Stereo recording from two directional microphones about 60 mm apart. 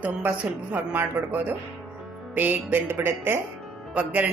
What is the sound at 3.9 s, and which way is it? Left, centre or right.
Speech, right.